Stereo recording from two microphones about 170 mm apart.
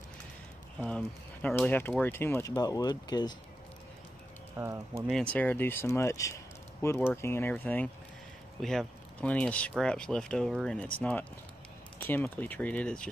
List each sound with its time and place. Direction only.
0.7 s speech: 5° left (ahead or behind); by 3.3 s 25° left (ahead or behind)
4.6 s speech: 15° right (ahead or behind)
5.0 s speech: 5° left (ahead or behind)